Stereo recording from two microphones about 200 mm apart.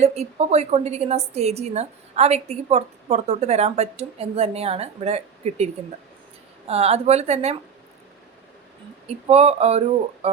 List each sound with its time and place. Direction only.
0.0 s a woman's voice: 35° right (ahead or behind)
6.7 s a woman's voice: 30° right (ahead or behind)
9.0 s a woman's voice: 30° right (ahead or behind)